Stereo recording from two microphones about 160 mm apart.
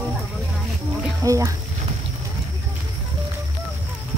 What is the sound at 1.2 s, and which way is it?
Speech, 20° right (ahead or behind).